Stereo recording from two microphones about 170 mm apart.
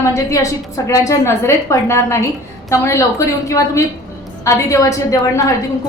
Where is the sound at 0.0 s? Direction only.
15° left (ahead or behind).